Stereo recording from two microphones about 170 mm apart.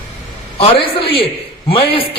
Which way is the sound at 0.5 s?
30° left (ahead or behind).